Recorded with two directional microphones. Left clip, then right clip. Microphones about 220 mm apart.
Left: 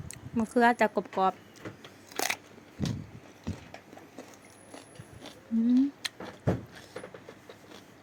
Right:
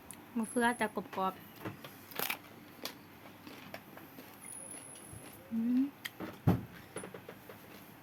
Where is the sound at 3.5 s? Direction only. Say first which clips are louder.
Left 9 dB; 15° left (ahead or behind).